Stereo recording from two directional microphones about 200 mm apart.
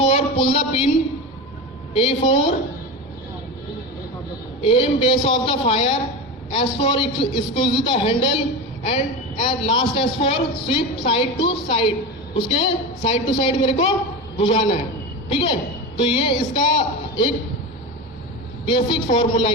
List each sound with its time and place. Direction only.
0.0 s a sound: 30° left (ahead or behind)
1.9 s a man's voice: 30° left (ahead or behind)
4.6 s a man's voice: 30° left (ahead or behind)
18.6 s a man's voice: 25° left (ahead or behind)